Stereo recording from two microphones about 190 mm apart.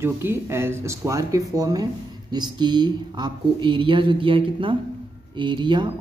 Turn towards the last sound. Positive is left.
turn(degrees=-25)  # may be behind; listen again after turning